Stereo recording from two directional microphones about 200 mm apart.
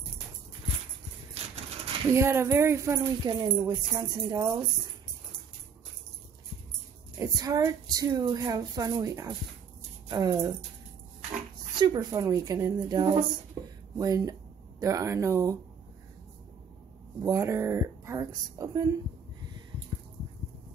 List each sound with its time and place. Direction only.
1.4 s a sound: 30° right (ahead or behind)
2.1 s a woman's voice: 15° right (ahead or behind)
3.0 s a woman's voice: 25° right (ahead or behind)
7.2 s a woman's voice: 20° right (ahead or behind)
11.7 s a woman's voice: 20° right (ahead or behind)
13.6 s a sound: 20° right (ahead or behind)
13.9 s a woman's voice: 15° right (ahead or behind)
17.2 s a woman's voice: 15° right (ahead or behind)